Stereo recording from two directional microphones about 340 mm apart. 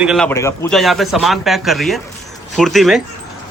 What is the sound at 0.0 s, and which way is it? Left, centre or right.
A man's voice, centre.